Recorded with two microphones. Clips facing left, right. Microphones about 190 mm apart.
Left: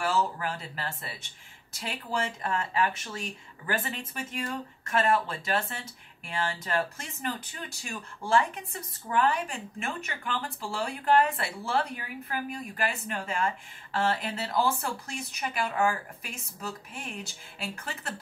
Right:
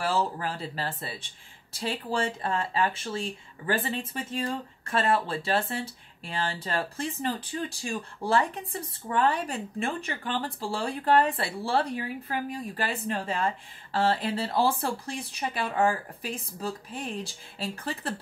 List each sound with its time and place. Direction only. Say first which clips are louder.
0.0 s speech: right 1 dB; 30° right (ahead or behind)